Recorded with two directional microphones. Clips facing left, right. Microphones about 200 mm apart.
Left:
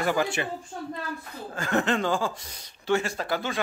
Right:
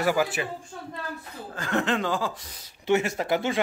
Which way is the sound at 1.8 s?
Centre (ahead or behind).